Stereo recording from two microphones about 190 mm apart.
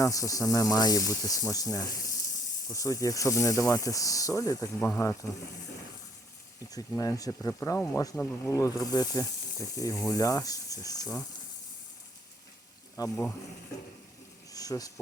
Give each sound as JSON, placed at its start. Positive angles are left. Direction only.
{"t": 0.0, "sound": "speech", "side_deg": 15}
{"t": 6.7, "sound": "speech", "side_deg": 20}
{"t": 13.0, "sound": "speech", "side_deg": 15}
{"t": 14.5, "sound": "a sound", "side_deg": 20}